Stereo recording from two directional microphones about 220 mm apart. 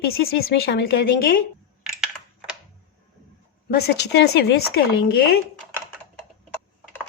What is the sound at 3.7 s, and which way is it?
Speech, 45° left (ahead or behind).